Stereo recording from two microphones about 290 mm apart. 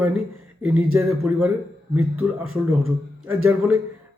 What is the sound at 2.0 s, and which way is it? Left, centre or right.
Speech, right.